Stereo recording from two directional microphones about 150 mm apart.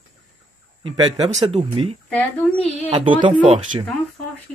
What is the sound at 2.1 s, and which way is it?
Speech, 10° left (ahead or behind).